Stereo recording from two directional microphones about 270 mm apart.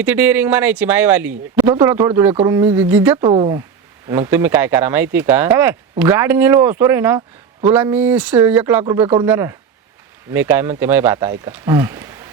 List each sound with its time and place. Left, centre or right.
0.0 s speech: centre
2.3 s speech: centre
2.6 s speech: centre